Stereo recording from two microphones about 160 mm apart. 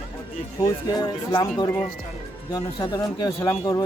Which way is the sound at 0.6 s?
25° left (ahead or behind).